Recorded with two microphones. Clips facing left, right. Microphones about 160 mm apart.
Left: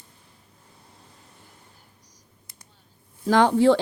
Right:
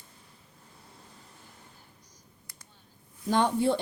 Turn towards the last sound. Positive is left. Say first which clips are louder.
# left 8 dB
turn(degrees=90)